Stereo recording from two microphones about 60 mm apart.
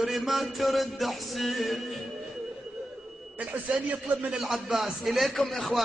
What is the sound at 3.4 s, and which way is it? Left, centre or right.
A man's voice, right.